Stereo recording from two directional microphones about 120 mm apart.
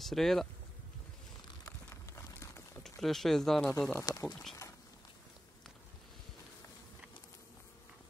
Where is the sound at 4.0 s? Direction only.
30° left (ahead or behind).